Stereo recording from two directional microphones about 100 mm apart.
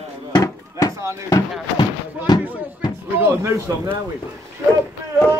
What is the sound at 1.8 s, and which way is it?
Speech, 50° left (ahead or behind).